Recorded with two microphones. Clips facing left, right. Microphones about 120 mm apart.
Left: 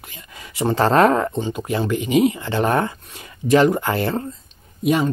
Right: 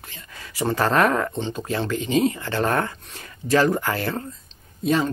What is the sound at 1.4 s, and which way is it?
Speech, 10° left (ahead or behind).